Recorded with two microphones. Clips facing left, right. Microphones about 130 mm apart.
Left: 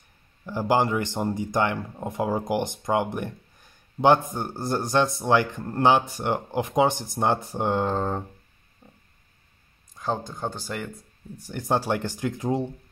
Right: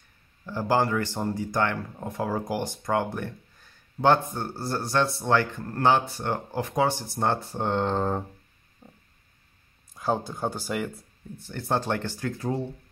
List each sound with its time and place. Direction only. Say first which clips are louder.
0.5 s speech: left 2 dB; 15° left (ahead or behind); by 8.2 s centre (ahead or behind)
9.9 s speech: right 2 dB; 10° right (ahead or behind)
11.3 s speech: left 2 dB; 15° left (ahead or behind)